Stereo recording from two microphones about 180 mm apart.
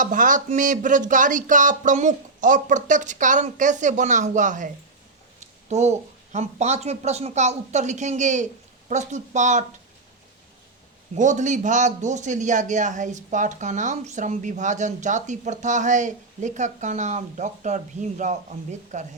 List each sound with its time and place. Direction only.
0.0 s a man's voice: 45° right (ahead or behind)
11.1 s a man's voice: 40° right (ahead or behind)